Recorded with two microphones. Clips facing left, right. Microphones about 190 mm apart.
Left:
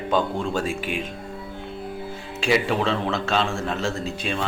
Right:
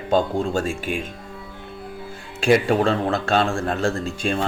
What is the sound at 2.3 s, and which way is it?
Speech, 50° right (ahead or behind).